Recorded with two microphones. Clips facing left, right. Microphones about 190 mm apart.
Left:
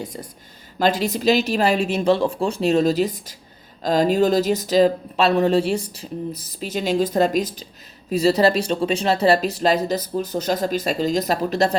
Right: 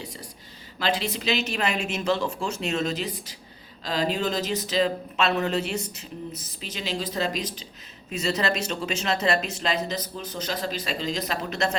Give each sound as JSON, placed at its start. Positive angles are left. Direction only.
{"t": 0.8, "sound": "speech", "side_deg": 40}
{"t": 6.6, "sound": "speech", "side_deg": 50}
{"t": 8.2, "sound": "speech", "side_deg": 35}